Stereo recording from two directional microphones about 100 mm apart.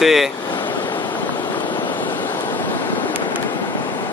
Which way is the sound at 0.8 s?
50° left (ahead or behind).